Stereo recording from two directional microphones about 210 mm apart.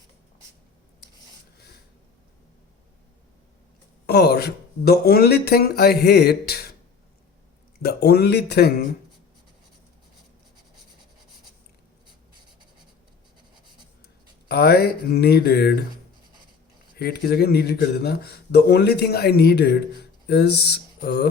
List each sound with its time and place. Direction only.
4.0 s speech: 50° left (ahead or behind)
7.8 s speech: 50° left (ahead or behind)
14.4 s speech: 50° left (ahead or behind)
16.9 s speech: 45° left (ahead or behind)